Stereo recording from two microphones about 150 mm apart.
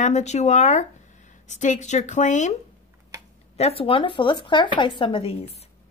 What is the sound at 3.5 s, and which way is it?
A woman's voice, 40° left (ahead or behind).